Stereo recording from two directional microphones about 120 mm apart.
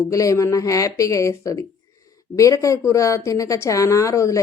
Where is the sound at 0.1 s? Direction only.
25° left (ahead or behind).